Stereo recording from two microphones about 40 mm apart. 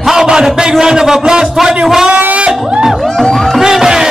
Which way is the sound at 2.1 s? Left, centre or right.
Right.